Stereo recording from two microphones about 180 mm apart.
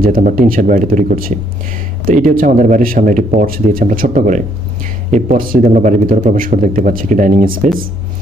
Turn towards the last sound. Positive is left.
turn(degrees=-45)  # may be behind; listen again after turning